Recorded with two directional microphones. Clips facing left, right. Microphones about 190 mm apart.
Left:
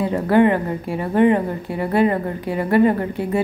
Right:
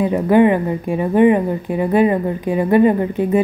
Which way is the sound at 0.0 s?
15° right (ahead or behind).